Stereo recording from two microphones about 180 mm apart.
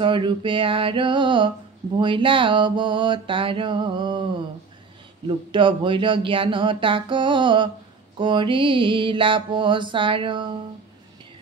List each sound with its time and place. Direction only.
0.0 s speech: 25° right (ahead or behind)